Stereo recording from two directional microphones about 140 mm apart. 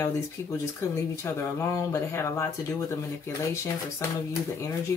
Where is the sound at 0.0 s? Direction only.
20° left (ahead or behind).